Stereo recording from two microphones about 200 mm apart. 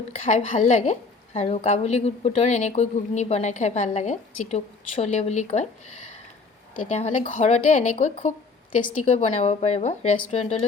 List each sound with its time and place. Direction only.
0.3 s a woman's voice: 35° left (ahead or behind)
6.9 s a woman's voice: 35° left (ahead or behind)